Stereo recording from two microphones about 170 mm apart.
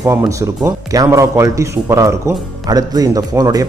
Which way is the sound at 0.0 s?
15° right (ahead or behind).